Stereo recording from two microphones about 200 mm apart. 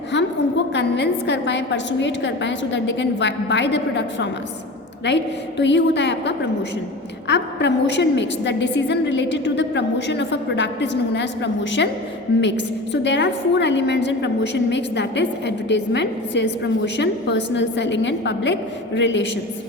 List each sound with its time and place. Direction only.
0.7 s a woman's voice: 60° left (ahead or behind)